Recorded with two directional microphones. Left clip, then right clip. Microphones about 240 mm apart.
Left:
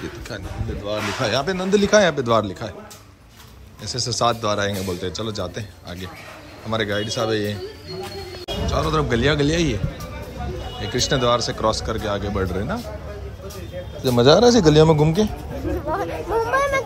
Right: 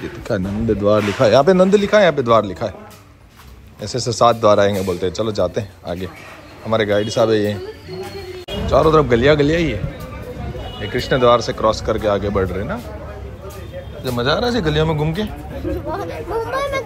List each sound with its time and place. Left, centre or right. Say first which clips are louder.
0.3 s speech: right 15 dB; left
1.2 s speech: right 12 dB; centre
1.8 s a man's voice: right 3 dB; centre
3.8 s a man's voice: right 6 dB; centre
8.6 s a man's voice: right 9 dB; centre
10.8 s a man's voice: right 5 dB; centre
14.0 s a man's voice: left 5 dB; left
15.9 s a sound: left 3 dB; centre